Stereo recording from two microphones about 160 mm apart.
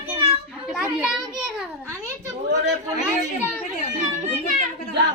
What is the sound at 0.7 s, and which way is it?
Children playing, 5° right (ahead or behind).